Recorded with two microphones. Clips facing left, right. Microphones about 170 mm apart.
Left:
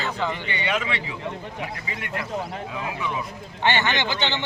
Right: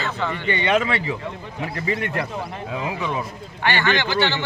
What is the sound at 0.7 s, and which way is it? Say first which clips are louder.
Speech: right 6 dB; 45° right (ahead or behind).